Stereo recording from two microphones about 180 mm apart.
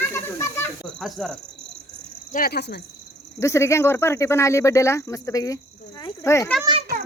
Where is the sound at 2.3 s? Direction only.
60° left (ahead or behind).